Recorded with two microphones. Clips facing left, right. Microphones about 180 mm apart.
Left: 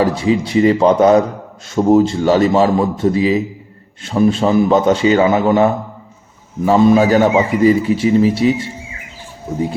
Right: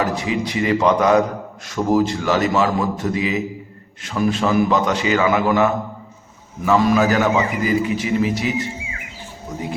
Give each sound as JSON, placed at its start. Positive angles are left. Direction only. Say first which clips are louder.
{"t": 0.0, "sound": "a man's voice", "louder": "left 6 dB", "side_deg": 30}